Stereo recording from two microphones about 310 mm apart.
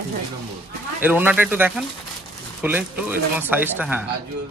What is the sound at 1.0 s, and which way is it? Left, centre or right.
Speech, centre.